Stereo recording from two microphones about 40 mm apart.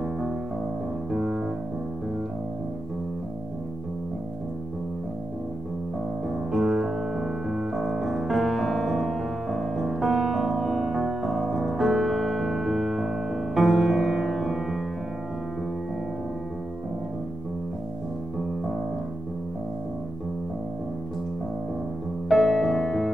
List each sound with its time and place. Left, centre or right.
1.1 s music: centre
6.5 s music: centre
22.3 s music: centre